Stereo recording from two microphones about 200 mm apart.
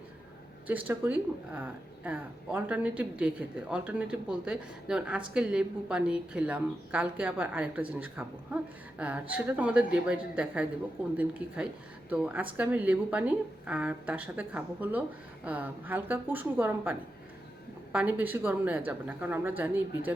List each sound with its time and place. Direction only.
0.7 s a woman's voice: 10° right (ahead or behind)